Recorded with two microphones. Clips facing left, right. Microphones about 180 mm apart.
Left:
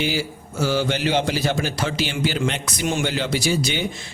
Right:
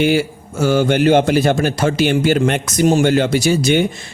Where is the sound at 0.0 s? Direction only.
55° right (ahead or behind).